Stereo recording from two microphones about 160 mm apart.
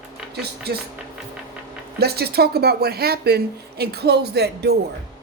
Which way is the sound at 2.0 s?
80° right.